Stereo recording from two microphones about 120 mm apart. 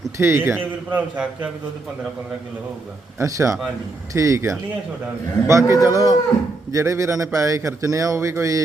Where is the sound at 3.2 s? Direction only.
25° right (ahead or behind).